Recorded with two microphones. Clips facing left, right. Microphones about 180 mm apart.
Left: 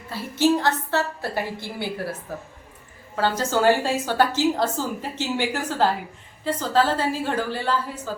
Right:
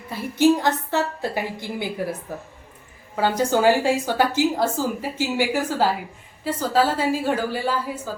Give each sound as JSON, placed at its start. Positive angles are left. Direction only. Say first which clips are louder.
{"t": 0.1, "sound": "a woman's voice", "louder": "right 3 dB", "side_deg": -15}
{"t": 3.2, "sound": "a woman's voice", "louder": "right 2 dB", "side_deg": -15}